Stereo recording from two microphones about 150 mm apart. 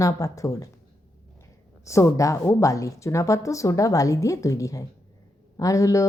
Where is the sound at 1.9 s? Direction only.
20° left (ahead or behind).